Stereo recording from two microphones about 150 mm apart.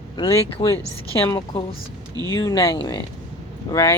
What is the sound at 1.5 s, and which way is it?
Speech, 40° left (ahead or behind).